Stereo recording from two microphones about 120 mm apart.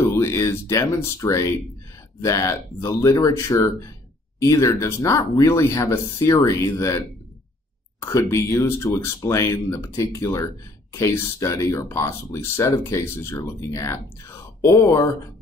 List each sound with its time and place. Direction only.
0.1 s speech: 20° left (ahead or behind)